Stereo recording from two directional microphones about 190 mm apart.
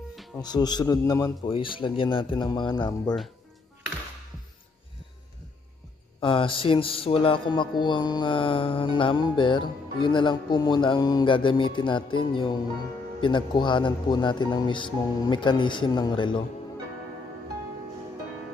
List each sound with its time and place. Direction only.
0.4 s music: 20° left (ahead or behind)
6.2 s music: 30° left (ahead or behind)